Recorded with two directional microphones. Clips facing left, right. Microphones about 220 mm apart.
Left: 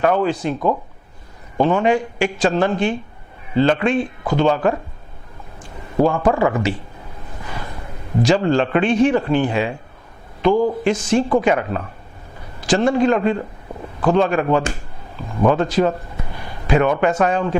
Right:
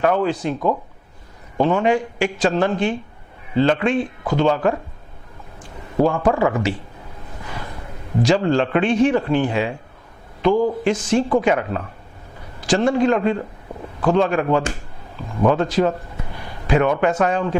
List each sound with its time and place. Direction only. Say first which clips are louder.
0.0 s speech: left 1 dB; 15° left (ahead or behind)
6.0 s speech: left 1 dB; 20° left (ahead or behind)
7.4 s gasp: left 1 dB; 20° left (ahead or behind)
8.2 s speech: left 1 dB; 15° left (ahead or behind)
10.5 s speech: left 1 dB; 40° left (ahead or behind)
10.8 s speech: left 1 dB; 10° left (ahead or behind)